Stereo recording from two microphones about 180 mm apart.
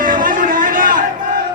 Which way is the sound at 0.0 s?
50° right (ahead or behind).